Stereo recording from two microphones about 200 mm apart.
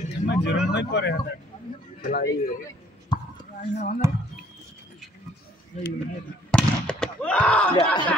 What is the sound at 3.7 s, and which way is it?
Speech, 35° left (ahead or behind).